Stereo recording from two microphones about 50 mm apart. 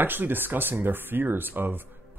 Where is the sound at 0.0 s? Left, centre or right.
Right.